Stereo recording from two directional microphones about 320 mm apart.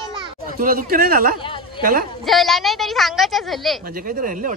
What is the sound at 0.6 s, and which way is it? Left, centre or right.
A woman's voice, right.